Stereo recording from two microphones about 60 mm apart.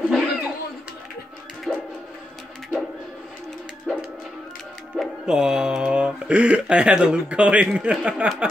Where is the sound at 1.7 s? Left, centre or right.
Centre.